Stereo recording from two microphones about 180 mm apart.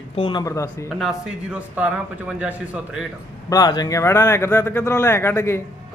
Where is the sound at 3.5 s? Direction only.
20° left (ahead or behind).